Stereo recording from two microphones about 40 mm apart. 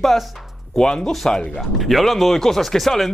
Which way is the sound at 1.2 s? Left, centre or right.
Centre.